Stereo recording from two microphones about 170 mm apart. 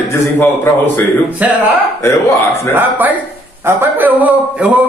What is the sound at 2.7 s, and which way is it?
A man's voice, 10° right (ahead or behind).